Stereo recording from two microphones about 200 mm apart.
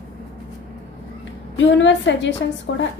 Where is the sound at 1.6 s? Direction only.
65° left (ahead or behind).